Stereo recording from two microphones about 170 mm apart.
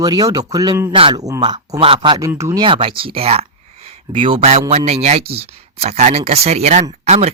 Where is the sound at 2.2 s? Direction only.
15° right (ahead or behind).